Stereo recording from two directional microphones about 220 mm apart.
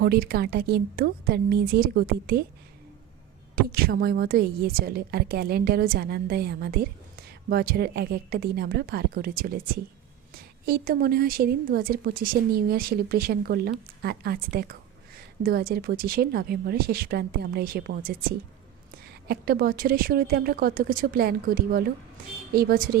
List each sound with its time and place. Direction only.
0.0 s a woman's voice: 45° right (ahead or behind)
3.5 s a woman's voice: 45° right (ahead or behind)
10.7 s a woman's voice: 40° right (ahead or behind)